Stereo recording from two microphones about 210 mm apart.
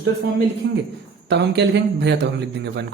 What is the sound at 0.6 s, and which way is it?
A man's voice, 55° right (ahead or behind).